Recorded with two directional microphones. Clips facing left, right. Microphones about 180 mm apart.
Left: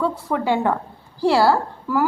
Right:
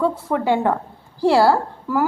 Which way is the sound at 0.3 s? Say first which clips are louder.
Even; 25° right (ahead or behind).